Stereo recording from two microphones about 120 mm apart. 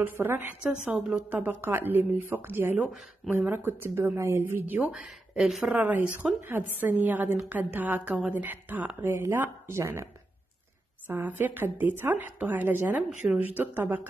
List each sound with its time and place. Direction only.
0.0 s a woman's voice: 15° right (ahead or behind)
5.0 s a woman's voice: 5° right (ahead or behind); by 10.0 s 20° right (ahead or behind)
11.1 s a woman's voice: 15° right (ahead or behind)